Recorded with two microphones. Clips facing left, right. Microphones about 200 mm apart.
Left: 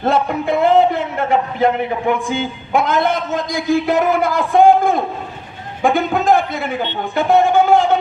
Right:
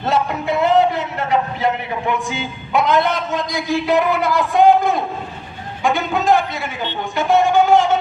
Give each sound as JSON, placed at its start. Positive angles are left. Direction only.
{"t": 0.0, "sound": "a man's voice", "side_deg": 55}